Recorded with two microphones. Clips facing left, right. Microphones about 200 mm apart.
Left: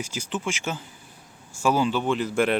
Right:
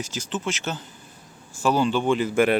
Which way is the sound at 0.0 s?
10° left (ahead or behind).